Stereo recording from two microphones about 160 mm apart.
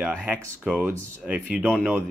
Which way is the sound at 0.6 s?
5° right (ahead or behind).